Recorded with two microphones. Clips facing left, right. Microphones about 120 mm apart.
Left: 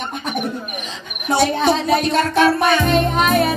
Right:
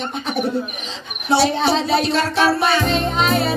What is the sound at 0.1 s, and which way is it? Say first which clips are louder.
Cricket: right 5 dB; 50° left (ahead or behind).